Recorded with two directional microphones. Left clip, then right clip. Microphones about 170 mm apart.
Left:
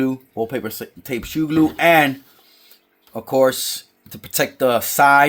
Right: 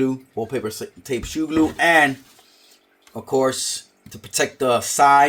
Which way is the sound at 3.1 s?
55° left (ahead or behind).